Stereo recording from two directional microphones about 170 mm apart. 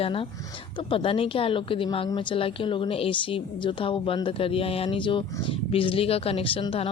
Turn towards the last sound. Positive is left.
turn(degrees=30)  # may be behind; listen again after turning